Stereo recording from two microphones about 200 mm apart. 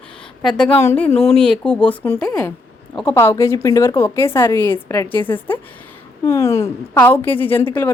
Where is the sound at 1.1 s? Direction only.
30° left (ahead or behind).